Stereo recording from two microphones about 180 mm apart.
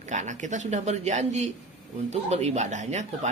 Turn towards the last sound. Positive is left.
turn(degrees=-40)  # may be behind; listen again after turning